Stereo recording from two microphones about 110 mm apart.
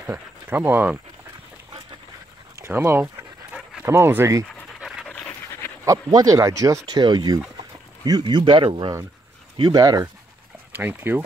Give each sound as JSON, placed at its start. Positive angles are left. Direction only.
{"t": 0.0, "sound": "speech", "side_deg": -15}
{"t": 2.6, "sound": "speech", "side_deg": -25}
{"t": 4.7, "sound": "pant", "side_deg": -5}
{"t": 5.9, "sound": "speech", "side_deg": -35}
{"t": 6.9, "sound": "speech", "side_deg": -40}
{"t": 9.6, "sound": "speech", "side_deg": -35}
{"t": 10.7, "sound": "speech", "side_deg": -20}